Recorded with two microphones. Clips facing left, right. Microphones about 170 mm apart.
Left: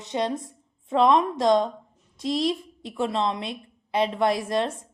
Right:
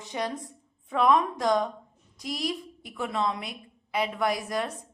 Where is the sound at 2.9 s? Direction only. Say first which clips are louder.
Left 4 dB; 25° left (ahead or behind).